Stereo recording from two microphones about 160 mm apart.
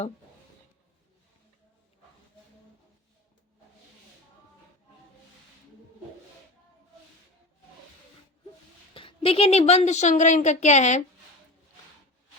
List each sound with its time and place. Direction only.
9.0 s a woman's voice: 35° left (ahead or behind)